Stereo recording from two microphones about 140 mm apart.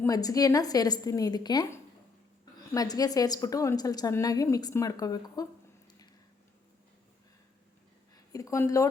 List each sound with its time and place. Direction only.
0.0 s a woman's voice: 25° left (ahead or behind)
2.7 s a woman's voice: 25° left (ahead or behind)
8.1 s speech: 25° left (ahead or behind)